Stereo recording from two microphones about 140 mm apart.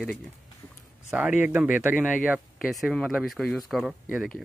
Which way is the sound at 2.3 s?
Centre (ahead or behind).